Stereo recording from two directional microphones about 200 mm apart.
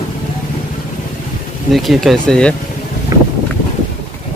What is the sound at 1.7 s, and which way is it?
Speech, centre (ahead or behind).